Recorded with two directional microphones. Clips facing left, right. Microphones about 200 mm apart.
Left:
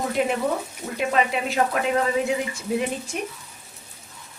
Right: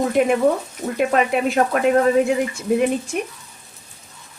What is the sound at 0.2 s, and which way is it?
Speech, 50° right (ahead or behind).